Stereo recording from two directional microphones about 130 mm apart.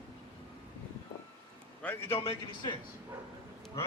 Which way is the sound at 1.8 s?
10° left (ahead or behind).